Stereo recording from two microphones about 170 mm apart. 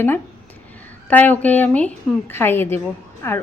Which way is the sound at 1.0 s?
10° left (ahead or behind).